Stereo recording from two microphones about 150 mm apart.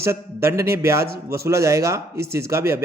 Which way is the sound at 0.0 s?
20° right (ahead or behind).